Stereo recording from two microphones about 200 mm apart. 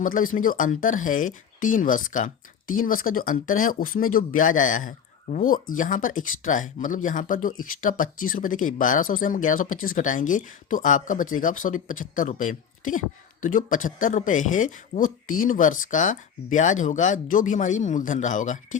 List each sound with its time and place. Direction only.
0.0 s speech: 45° left (ahead or behind)